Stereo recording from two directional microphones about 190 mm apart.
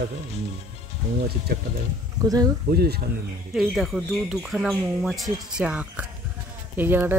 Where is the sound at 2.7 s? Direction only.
55° right (ahead or behind).